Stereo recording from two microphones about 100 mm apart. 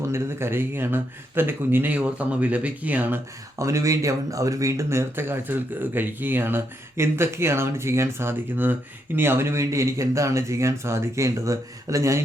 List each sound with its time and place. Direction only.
0.1 s speech: 25° right (ahead or behind)
3.6 s speech: 30° right (ahead or behind)